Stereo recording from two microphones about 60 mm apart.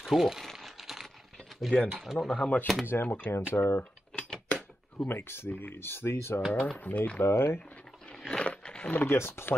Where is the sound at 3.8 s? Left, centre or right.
Centre.